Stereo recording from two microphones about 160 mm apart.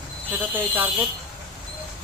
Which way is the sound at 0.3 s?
10° right (ahead or behind).